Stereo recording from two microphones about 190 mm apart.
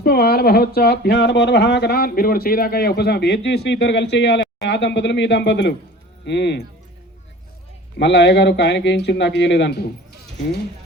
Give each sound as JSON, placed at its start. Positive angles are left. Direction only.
{"t": 0.0, "sound": "speech", "side_deg": 55}
{"t": 7.9, "sound": "speech", "side_deg": 65}